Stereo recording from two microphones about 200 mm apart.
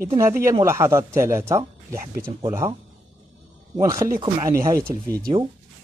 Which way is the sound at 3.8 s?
15° right (ahead or behind).